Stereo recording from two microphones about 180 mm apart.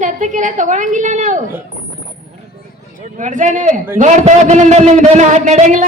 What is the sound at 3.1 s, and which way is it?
A man's voice, 45° right (ahead or behind).